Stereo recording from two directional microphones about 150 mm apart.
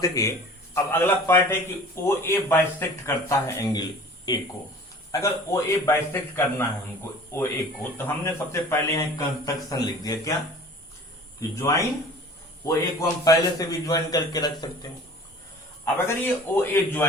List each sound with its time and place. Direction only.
0.0 s a man's voice: 20° left (ahead or behind)
5.1 s a man's voice: 20° left (ahead or behind)
7.9 s a man's voice: 15° left (ahead or behind)
11.3 s a man's voice: 20° left (ahead or behind)
15.8 s a man's voice: 15° left (ahead or behind)